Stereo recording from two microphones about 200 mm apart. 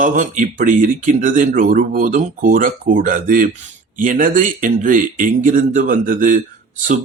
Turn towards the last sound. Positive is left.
turn(degrees=-40)  # may be behind; listen again after turning